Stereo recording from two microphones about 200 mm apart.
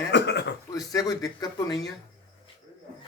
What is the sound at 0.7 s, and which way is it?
A man's voice, 15° left (ahead or behind).